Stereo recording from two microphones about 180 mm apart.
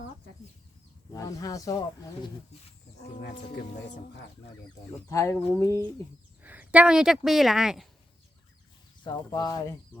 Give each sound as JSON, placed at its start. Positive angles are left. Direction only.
{"t": 1.1, "sound": "speech", "side_deg": 20}
{"t": 5.0, "sound": "speech", "side_deg": 15}
{"t": 6.4, "sound": "speech", "side_deg": -10}
{"t": 9.0, "sound": "speech", "side_deg": 20}